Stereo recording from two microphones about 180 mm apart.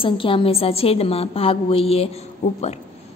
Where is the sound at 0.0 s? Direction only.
30° left (ahead or behind).